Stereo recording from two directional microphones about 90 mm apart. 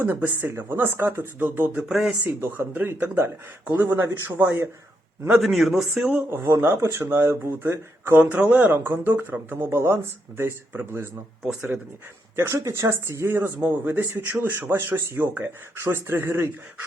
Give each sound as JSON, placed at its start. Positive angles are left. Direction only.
{"t": 0.0, "sound": "speech", "side_deg": -20}
{"t": 1.9, "sound": "speech", "side_deg": -5}
{"t": 2.2, "sound": "speech", "side_deg": -25}
{"t": 5.3, "sound": "speech", "side_deg": -5}
{"t": 6.3, "sound": "speech", "side_deg": -25}
{"t": 11.4, "sound": "speech", "side_deg": -10}
{"t": 12.4, "sound": "speech", "side_deg": -35}